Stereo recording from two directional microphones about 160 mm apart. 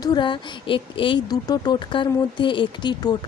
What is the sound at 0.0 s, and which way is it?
Speech, 30° left (ahead or behind).